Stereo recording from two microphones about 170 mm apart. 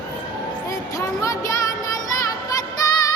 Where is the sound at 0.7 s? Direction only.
20° left (ahead or behind).